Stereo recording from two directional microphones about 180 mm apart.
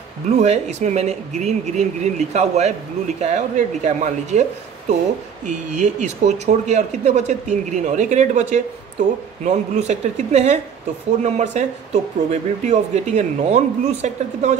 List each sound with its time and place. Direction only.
0.4 s speech: 40° right (ahead or behind)